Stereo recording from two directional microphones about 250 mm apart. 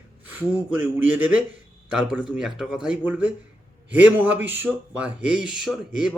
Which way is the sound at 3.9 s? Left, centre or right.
Centre.